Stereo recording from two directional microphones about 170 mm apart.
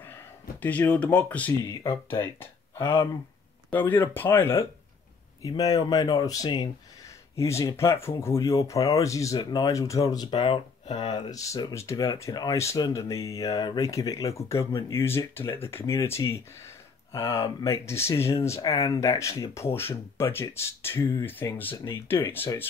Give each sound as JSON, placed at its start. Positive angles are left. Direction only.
{"t": 0.0, "sound": "speech", "side_deg": 10}